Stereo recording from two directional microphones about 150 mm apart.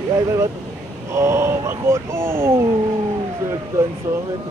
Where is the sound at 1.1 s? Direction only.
15° right (ahead or behind).